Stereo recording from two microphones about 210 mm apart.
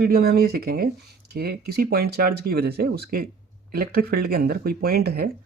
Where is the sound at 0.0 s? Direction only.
45° right (ahead or behind).